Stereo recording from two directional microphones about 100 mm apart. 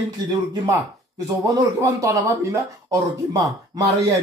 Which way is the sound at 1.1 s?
35° right (ahead or behind).